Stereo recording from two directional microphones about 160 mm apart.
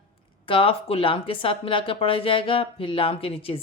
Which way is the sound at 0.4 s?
35° left (ahead or behind).